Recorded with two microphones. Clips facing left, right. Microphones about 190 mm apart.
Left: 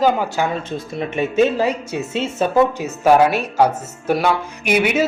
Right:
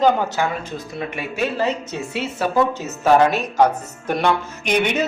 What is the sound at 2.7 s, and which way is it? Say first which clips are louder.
A woman's voice: left 2 dB; 10° left (ahead or behind).